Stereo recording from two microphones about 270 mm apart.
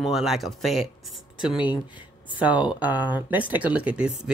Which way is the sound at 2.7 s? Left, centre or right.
Centre.